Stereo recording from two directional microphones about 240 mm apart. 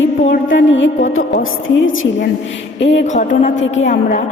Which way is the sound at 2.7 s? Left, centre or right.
Left.